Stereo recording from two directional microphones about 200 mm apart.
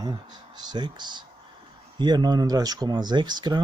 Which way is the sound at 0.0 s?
20° right (ahead or behind).